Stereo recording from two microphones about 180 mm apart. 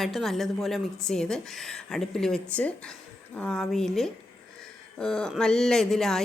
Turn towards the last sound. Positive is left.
turn(degrees=0)  # may be behind; listen again after turning